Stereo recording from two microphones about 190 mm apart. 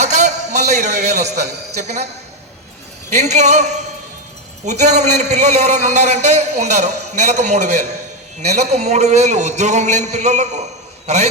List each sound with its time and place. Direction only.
0.0 s a man's voice: 40° right (ahead or behind)
3.1 s a man's voice: 40° right (ahead or behind)